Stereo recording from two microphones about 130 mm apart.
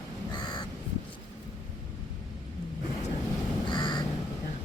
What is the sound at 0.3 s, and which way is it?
Crow, 35° left (ahead or behind).